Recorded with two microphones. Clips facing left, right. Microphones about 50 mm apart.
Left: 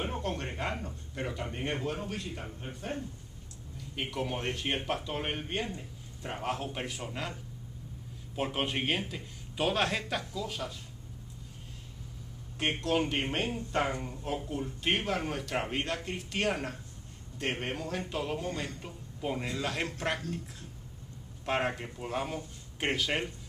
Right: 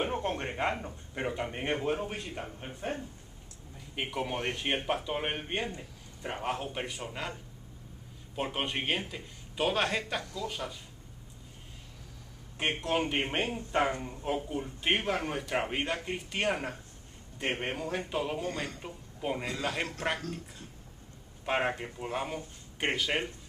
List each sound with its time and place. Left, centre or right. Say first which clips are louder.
0.0 s speech: right 3 dB; right; by 7.3 s centre
8.4 s speech: left 1 dB; centre
12.5 s a man's voice: even; centre
21.5 s speech: right 1 dB; centre